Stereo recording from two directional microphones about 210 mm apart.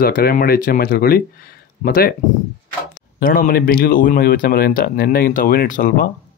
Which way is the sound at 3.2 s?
40° left (ahead or behind).